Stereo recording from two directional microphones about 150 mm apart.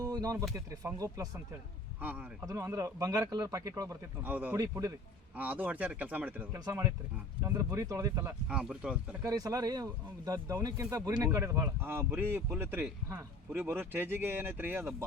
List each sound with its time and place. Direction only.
0.0 s music: 25° right (ahead or behind)
0.5 s speech: 25° right (ahead or behind)
2.0 s speech: 10° right (ahead or behind)
2.5 s speech: 20° right (ahead or behind)
4.2 s speech: 10° right (ahead or behind)
4.5 s speech: 20° right (ahead or behind)
5.4 s speech: 10° right (ahead or behind)
6.5 s speech: 20° right (ahead or behind)
8.4 s speech: 5° right (ahead or behind)
9.2 s speech: 25° right (ahead or behind)